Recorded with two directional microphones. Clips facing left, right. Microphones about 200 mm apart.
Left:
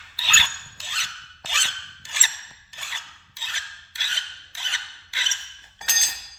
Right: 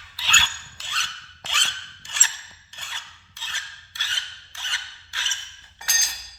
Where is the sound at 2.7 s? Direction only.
10° left (ahead or behind).